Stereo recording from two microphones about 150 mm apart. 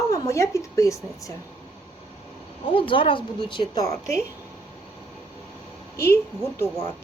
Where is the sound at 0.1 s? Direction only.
20° left (ahead or behind).